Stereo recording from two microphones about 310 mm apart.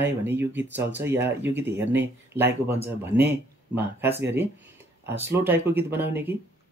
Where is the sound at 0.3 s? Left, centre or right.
Centre.